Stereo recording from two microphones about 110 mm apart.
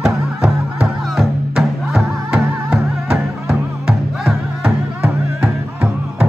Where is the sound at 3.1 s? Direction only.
5° right (ahead or behind).